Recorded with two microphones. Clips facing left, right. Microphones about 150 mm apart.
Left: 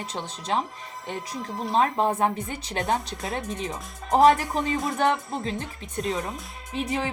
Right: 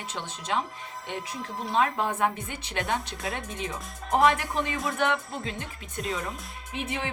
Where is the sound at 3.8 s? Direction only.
Centre (ahead or behind).